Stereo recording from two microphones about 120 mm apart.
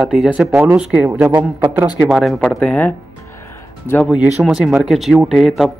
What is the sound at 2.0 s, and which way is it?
Speech, centre (ahead or behind).